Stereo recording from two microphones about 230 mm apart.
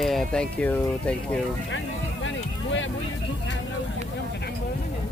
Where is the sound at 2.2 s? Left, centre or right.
Left.